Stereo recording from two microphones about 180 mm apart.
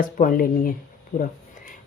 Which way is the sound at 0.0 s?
50° left (ahead or behind).